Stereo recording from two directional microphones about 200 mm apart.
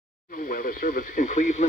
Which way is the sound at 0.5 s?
40° left (ahead or behind).